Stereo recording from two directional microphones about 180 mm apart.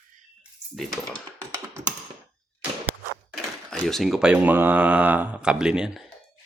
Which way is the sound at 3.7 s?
Centre (ahead or behind).